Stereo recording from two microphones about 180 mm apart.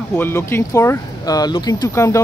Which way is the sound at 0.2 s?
15° left (ahead or behind).